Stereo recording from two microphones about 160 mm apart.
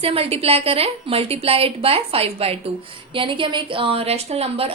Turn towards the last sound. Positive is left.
turn(degrees=-40)  # may be behind; listen again after turning